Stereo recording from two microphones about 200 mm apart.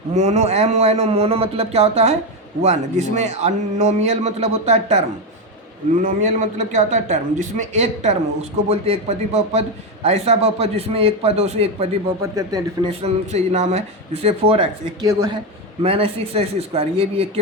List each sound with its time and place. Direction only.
0.1 s a man's voice: 35° right (ahead or behind)
12.2 s a man's voice: 15° right (ahead or behind)
12.9 s a man's voice: 30° right (ahead or behind)
15.8 s a man's voice: 30° right (ahead or behind)